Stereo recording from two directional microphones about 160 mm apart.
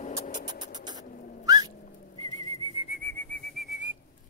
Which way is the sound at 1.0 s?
60° left (ahead or behind).